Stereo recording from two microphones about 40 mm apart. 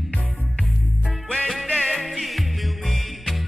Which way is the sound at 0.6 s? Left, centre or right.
Left.